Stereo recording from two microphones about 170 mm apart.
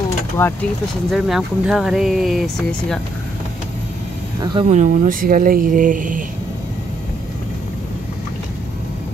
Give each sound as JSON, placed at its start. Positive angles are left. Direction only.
{"t": 0.4, "sound": "speech", "side_deg": 15}
{"t": 1.1, "sound": "speech", "side_deg": -5}
{"t": 4.4, "sound": "speech", "side_deg": -25}
{"t": 4.6, "sound": "speech", "side_deg": -45}